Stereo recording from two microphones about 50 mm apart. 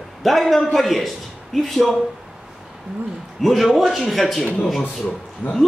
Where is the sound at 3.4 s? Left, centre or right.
Centre.